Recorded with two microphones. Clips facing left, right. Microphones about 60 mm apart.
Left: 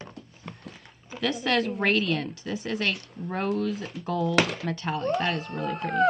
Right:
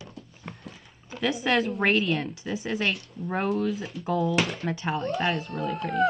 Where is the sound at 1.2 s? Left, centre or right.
Centre.